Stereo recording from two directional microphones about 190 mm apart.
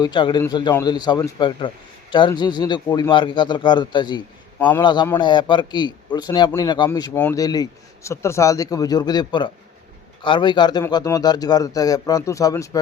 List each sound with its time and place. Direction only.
0.0 s a man's voice: 25° left (ahead or behind)